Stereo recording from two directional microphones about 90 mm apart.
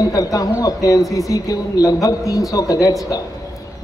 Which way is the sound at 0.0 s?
40° left (ahead or behind).